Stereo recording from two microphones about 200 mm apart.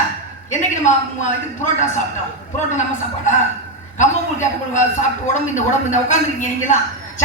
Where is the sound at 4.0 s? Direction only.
35° left (ahead or behind).